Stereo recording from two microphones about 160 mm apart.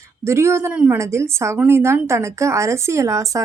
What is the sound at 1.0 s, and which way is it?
A woman's voice, 15° right (ahead or behind).